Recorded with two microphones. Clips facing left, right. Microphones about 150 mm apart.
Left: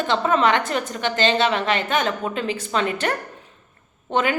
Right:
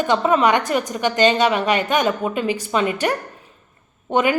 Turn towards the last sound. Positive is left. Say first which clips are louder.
# right 3 dB
turn(degrees=-15)  # may be behind; listen again after turning